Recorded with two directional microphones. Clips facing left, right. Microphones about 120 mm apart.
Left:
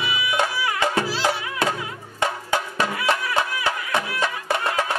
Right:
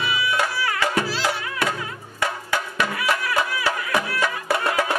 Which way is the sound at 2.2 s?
25° left (ahead or behind).